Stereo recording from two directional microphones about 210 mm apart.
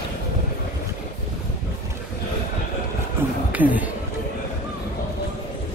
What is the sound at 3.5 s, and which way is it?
Speech, 5° right (ahead or behind).